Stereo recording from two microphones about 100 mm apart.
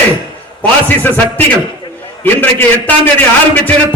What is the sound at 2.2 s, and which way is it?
A man's voice, 20° left (ahead or behind).